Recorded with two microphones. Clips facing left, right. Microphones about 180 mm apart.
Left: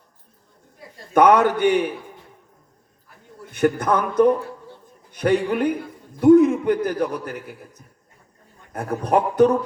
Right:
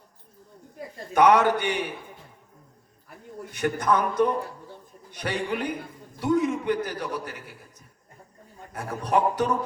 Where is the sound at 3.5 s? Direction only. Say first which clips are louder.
Left 5 dB; 55° left (ahead or behind).